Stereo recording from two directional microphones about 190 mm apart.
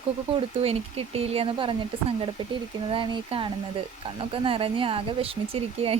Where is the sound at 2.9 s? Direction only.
25° right (ahead or behind).